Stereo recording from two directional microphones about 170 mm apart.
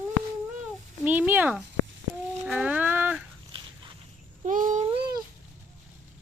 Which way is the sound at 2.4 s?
5° right (ahead or behind).